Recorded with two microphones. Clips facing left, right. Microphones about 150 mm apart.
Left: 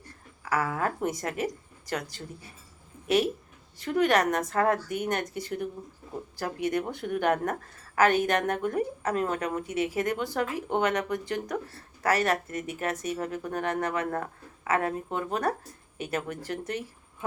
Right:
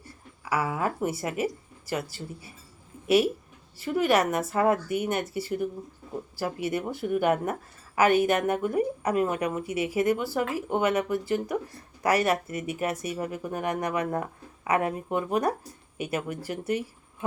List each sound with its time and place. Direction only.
0.0 s a woman's voice: 10° right (ahead or behind)
3.8 s a woman's voice: 5° right (ahead or behind)